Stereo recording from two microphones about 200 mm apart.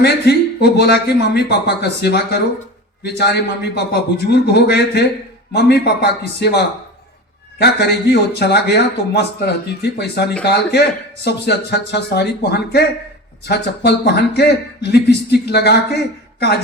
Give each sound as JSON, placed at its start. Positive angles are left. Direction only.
{"t": 0.0, "sound": "a man's voice", "side_deg": 55}